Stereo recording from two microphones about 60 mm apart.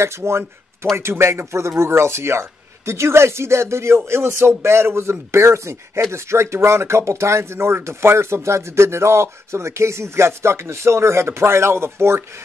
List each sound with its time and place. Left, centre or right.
0.0 s speech: right